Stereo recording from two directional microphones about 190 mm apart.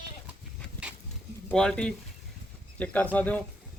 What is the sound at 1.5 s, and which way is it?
A man's voice, 5° left (ahead or behind).